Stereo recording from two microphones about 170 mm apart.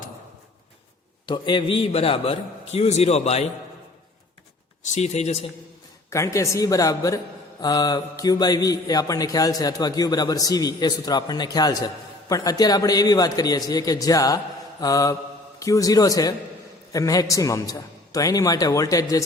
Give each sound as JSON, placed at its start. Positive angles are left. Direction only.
{"t": 1.3, "sound": "a man's voice", "side_deg": 25}
{"t": 4.8, "sound": "a man's voice", "side_deg": 45}
{"t": 6.1, "sound": "speech", "side_deg": 15}